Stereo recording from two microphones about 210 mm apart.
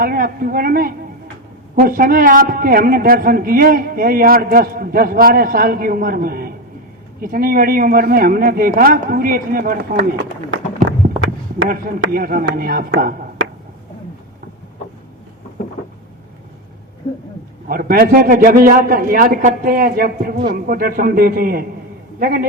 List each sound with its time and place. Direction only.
0.0 s a man's voice: 45° right (ahead or behind)
10.8 s run: 65° right (ahead or behind)
12.1 s a man's voice: 45° right (ahead or behind)
17.7 s a man's voice: 45° right (ahead or behind)